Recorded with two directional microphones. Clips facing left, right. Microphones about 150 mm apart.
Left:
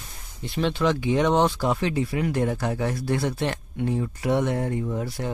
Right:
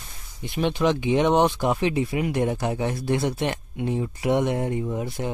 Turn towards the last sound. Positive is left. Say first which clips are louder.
# right 1 dB
turn(degrees=-20)  # may be behind; listen again after turning